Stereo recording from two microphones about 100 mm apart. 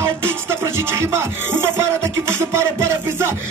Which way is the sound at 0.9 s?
25° right (ahead or behind).